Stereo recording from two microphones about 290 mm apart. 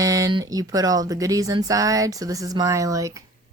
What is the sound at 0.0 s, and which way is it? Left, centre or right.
Speech, centre.